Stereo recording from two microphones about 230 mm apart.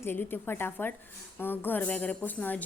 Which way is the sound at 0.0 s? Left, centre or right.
Centre.